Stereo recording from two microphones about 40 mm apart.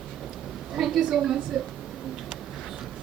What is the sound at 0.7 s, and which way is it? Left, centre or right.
Speech, centre.